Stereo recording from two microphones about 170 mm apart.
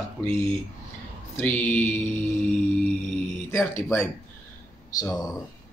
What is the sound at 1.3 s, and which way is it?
Speech, 10° left (ahead or behind).